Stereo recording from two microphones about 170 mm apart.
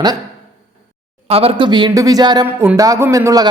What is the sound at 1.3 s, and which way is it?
A man's voice, 35° right (ahead or behind).